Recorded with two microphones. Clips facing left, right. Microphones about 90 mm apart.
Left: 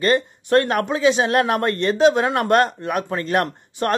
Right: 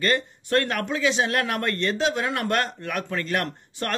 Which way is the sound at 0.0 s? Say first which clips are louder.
Left 5 dB; 25° left (ahead or behind).